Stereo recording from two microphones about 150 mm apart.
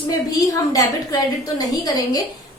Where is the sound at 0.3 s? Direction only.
25° left (ahead or behind).